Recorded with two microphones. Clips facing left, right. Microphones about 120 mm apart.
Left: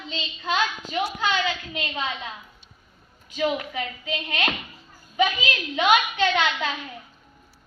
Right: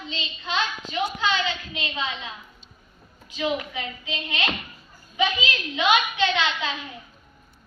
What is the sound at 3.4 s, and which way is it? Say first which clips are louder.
A woman's voice: left 2 dB; 50° left (ahead or behind).